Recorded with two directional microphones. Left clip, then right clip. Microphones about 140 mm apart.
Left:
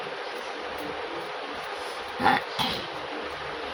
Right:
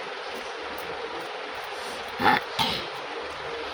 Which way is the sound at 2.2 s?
20° right (ahead or behind).